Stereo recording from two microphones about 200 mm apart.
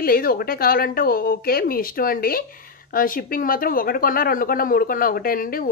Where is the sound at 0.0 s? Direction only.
45° left (ahead or behind).